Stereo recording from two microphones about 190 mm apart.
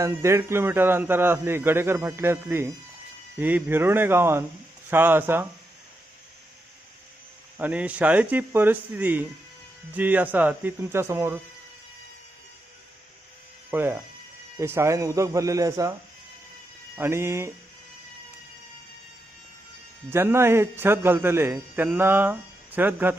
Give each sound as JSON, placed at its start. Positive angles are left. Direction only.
{"t": 0.0, "sound": "a man's voice", "side_deg": -15}
{"t": 7.6, "sound": "a man's voice", "side_deg": -10}
{"t": 13.7, "sound": "a man's voice", "side_deg": -10}
{"t": 17.0, "sound": "a man's voice", "side_deg": -15}
{"t": 20.1, "sound": "a man's voice", "side_deg": -10}